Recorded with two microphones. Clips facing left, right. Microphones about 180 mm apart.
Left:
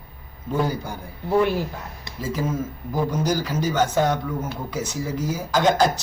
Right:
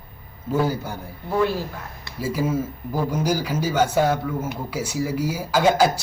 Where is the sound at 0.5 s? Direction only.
5° right (ahead or behind).